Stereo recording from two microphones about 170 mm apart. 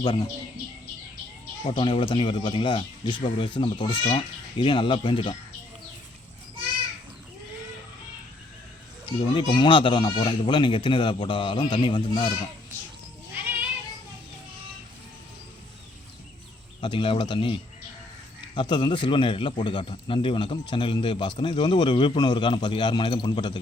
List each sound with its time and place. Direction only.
0.0 s a man's voice: 30° left (ahead or behind)
1.7 s speech: 30° left (ahead or behind)
9.3 s speech: 30° left (ahead or behind)
13.3 s cat: 10° right (ahead or behind)
16.8 s a man's voice: 30° left (ahead or behind)